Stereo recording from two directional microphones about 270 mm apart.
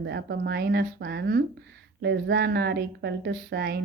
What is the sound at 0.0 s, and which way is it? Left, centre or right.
Speech, right.